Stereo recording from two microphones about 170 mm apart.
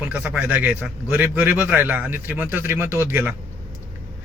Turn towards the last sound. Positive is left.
turn(degrees=-10)  # may be behind; listen again after turning